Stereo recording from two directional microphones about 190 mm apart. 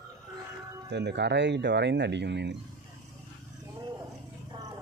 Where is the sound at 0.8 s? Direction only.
65° right (ahead or behind).